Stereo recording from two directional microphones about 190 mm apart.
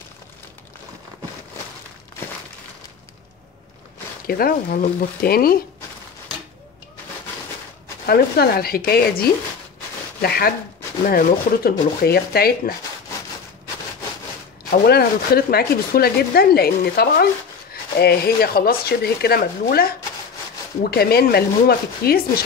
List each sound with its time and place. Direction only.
4.3 s speech: 50° left (ahead or behind)
8.1 s speech: 50° left (ahead or behind)
14.7 s speech: 55° left (ahead or behind)